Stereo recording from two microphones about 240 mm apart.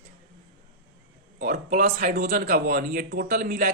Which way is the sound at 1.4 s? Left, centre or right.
Right.